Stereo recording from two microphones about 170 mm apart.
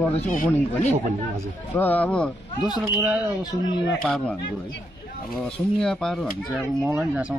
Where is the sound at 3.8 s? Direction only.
5° left (ahead or behind).